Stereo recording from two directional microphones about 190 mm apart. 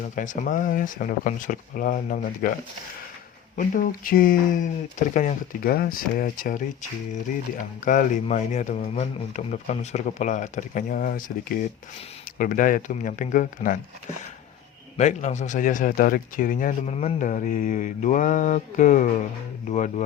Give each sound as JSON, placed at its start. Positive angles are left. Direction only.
{"t": 0.0, "sound": "speech", "side_deg": 45}
{"t": 7.9, "sound": "speech", "side_deg": 40}
{"t": 14.9, "sound": "speech", "side_deg": 40}